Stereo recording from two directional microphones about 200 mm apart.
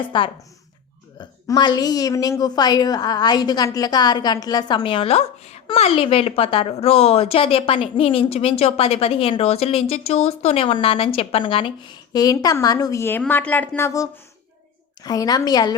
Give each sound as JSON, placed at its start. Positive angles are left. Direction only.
{"t": 0.1, "sound": "a woman's voice", "side_deg": 25}